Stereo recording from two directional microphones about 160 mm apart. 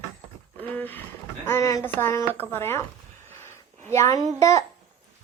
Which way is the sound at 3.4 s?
15° left (ahead or behind).